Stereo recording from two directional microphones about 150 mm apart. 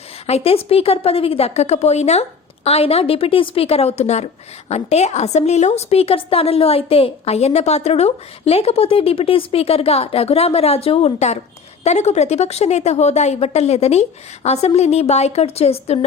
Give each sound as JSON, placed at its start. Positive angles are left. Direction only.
{"t": 0.3, "sound": "a woman's voice", "side_deg": 40}